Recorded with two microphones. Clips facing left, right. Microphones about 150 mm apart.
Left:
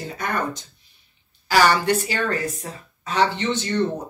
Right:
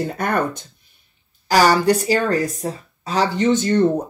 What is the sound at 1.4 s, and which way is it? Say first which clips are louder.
Speech: right 3 dB; 40° right (ahead or behind).